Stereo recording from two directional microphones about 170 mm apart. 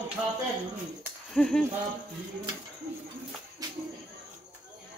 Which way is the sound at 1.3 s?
5° left (ahead or behind).